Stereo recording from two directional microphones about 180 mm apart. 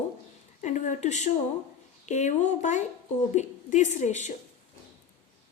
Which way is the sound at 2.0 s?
40° left (ahead or behind).